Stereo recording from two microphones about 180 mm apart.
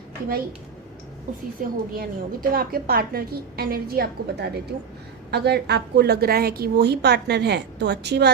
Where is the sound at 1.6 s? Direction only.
50° right (ahead or behind).